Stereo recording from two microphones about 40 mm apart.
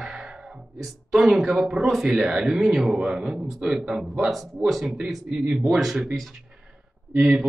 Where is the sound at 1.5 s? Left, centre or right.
Centre.